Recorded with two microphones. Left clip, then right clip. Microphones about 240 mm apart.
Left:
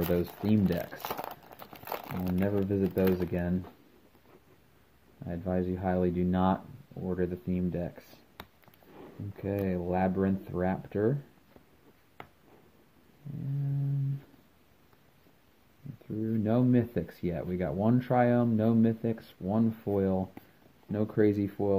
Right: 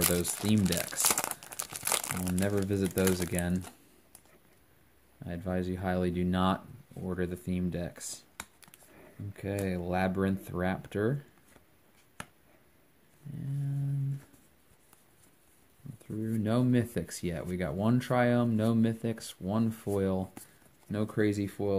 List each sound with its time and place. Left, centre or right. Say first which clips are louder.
0.0 s crumpling: left 1 dB; centre
2.3 s speech: left 2 dB; right
5.2 s speech: left 2 dB; centre
16.3 s speech: left 2 dB; centre